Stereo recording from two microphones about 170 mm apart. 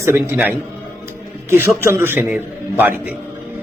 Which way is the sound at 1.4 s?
15° right (ahead or behind).